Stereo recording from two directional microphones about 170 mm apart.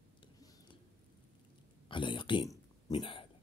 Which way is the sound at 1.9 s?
30° left (ahead or behind).